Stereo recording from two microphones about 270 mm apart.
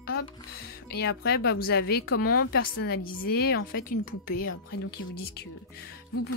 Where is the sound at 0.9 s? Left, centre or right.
Left.